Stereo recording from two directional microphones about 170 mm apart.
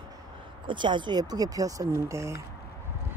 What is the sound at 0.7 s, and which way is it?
Speech, 30° right (ahead or behind).